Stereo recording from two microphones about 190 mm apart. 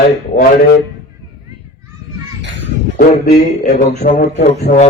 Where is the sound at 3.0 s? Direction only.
55° left (ahead or behind).